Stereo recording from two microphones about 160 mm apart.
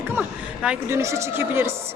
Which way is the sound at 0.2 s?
10° right (ahead or behind).